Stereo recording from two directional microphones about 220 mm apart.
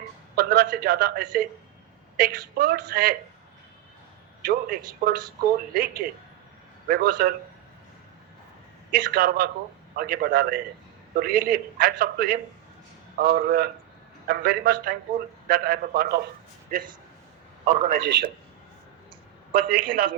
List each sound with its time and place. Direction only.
0.3 s a man's voice: 45° right (ahead or behind)
4.4 s a woman's voice: 40° right (ahead or behind)
8.9 s a woman's voice: 40° right (ahead or behind)
19.5 s a man's voice: 40° right (ahead or behind)